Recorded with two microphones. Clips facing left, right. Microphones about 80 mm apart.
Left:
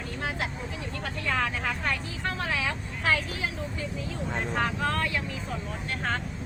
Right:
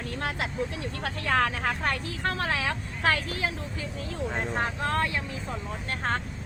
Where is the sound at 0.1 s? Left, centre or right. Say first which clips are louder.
Even; right.